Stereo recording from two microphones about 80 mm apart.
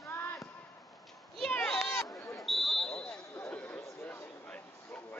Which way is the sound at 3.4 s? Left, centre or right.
Left.